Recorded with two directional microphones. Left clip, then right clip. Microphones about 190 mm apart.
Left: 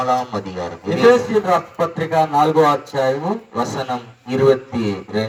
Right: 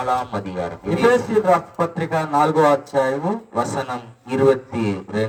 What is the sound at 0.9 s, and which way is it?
Speech, 25° left (ahead or behind).